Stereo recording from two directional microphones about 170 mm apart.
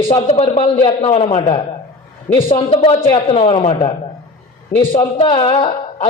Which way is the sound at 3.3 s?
40° left (ahead or behind).